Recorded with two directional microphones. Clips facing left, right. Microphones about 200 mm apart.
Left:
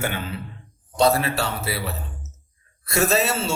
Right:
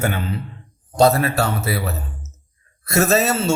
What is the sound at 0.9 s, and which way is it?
A man's voice, 45° right (ahead or behind).